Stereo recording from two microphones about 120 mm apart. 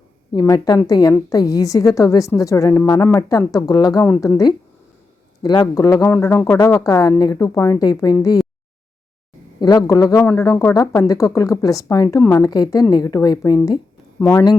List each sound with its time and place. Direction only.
0.3 s speech: 30° left (ahead or behind)
4.0 s a woman's voice: 15° left (ahead or behind)
5.4 s speech: 35° left (ahead or behind)
9.6 s a woman's voice: 35° left (ahead or behind)
14.2 s speech: 20° left (ahead or behind)